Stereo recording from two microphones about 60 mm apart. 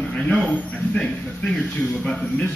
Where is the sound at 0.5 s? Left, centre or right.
Centre.